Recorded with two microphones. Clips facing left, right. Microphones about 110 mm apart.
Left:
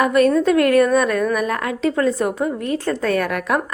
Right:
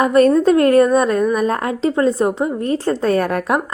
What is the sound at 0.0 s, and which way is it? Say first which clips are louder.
A woman's voice: right 3 dB; 35° right (ahead or behind).